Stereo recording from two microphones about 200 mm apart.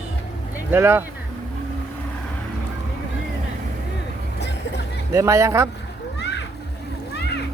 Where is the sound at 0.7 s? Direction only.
10° right (ahead or behind).